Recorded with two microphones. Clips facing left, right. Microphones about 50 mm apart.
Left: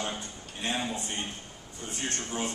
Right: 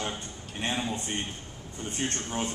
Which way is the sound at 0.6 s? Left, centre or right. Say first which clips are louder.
Right 1 dB; right.